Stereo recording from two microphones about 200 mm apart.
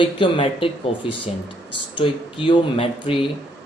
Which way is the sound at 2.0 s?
25° left (ahead or behind).